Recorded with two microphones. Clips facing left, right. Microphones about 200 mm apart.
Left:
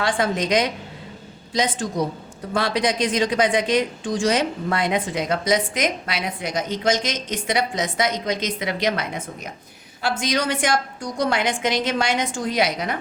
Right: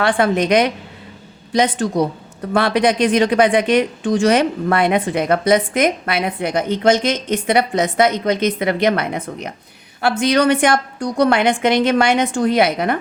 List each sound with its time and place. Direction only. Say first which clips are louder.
0.0 s a woman's voice: right 6 dB; 60° right (ahead or behind)